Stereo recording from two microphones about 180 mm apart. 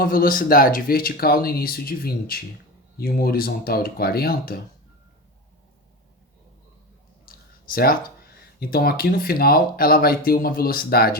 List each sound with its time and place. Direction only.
0.0 s speech: 55° left (ahead or behind)
7.3 s speech: 55° left (ahead or behind)